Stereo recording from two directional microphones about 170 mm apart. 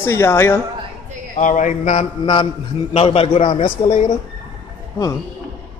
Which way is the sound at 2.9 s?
35° left (ahead or behind).